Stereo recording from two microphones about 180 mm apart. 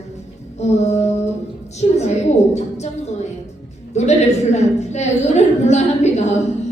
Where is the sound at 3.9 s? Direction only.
40° left (ahead or behind).